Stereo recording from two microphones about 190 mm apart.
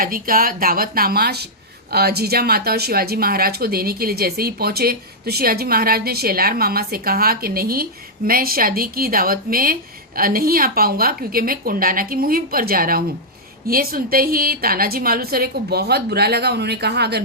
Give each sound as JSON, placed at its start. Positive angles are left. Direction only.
{"t": 0.0, "sound": "speech", "side_deg": -50}